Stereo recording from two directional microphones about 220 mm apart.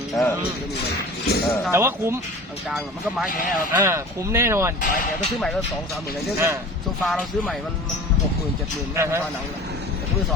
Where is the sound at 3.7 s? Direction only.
10° right (ahead or behind).